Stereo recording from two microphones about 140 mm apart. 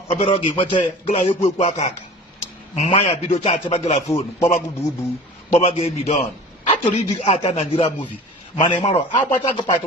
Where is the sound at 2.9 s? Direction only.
40° left (ahead or behind).